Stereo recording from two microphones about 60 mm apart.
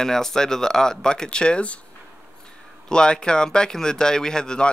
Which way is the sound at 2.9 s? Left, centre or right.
Centre.